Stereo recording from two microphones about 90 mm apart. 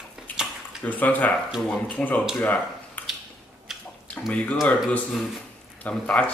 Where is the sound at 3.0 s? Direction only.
20° left (ahead or behind).